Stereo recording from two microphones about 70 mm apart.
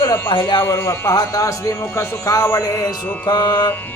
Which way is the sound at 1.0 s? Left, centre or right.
Left.